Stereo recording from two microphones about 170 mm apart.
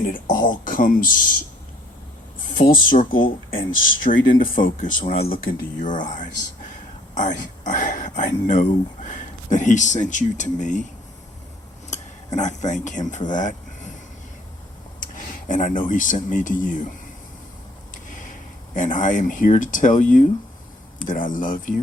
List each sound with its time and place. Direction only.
0.0 s speech: 55° left (ahead or behind)
2.6 s speech: 55° left (ahead or behind)
11.9 s speech: 45° left (ahead or behind)
15.0 s speech: 50° left (ahead or behind)
18.7 s speech: 50° left (ahead or behind)